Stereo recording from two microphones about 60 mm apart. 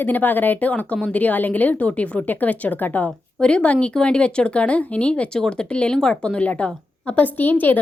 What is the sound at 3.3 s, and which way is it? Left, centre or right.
A woman's voice, centre.